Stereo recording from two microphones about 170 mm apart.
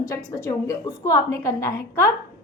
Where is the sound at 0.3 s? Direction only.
20° left (ahead or behind).